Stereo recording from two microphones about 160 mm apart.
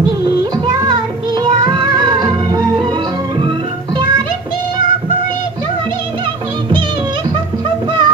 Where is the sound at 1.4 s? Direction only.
30° right (ahead or behind).